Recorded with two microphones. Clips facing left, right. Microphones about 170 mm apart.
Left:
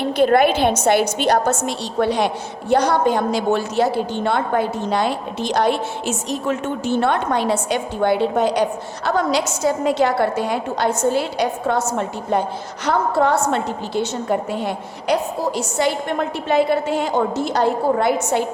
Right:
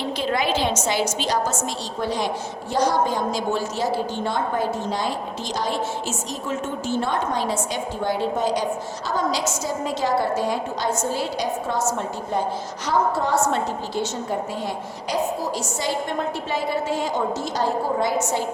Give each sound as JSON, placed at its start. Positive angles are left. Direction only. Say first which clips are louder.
{"t": 0.0, "sound": "a woman's voice", "louder": "left 9 dB", "side_deg": 55}